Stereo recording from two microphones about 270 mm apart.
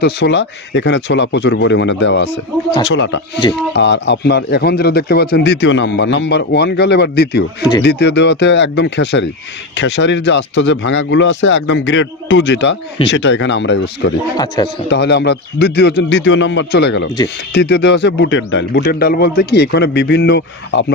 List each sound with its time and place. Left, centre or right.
0.0 s speech: left
14.3 s speech: centre
14.9 s speech: left